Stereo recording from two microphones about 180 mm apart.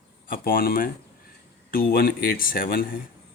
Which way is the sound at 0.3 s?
55° left (ahead or behind).